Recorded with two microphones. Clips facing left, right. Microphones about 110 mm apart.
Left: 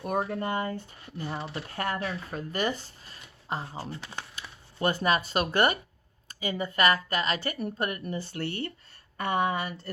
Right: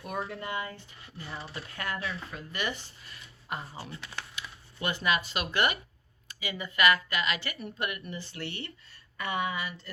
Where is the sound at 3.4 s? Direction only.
30° left (ahead or behind).